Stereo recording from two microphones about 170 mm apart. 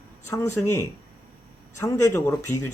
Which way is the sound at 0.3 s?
20° left (ahead or behind).